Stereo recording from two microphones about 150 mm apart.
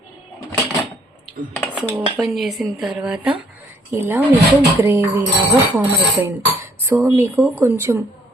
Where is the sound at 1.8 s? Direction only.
10° right (ahead or behind).